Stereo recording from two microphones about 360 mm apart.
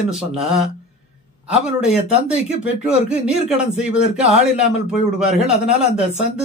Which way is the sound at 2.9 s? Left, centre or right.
Centre.